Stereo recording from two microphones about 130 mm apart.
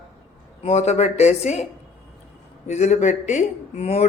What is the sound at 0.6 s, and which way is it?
Speech, 55° left (ahead or behind).